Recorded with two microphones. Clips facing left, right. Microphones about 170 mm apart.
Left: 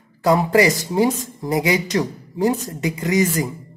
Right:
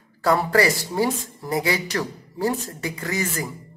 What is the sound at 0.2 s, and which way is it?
Speech, 15° left (ahead or behind).